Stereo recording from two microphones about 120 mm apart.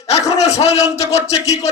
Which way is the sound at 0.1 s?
65° left (ahead or behind).